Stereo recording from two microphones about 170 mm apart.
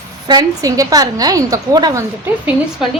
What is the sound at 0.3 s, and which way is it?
A woman's voice, 20° right (ahead or behind).